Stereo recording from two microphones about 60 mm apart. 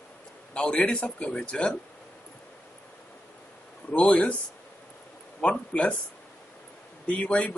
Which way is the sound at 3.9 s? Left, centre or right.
Left.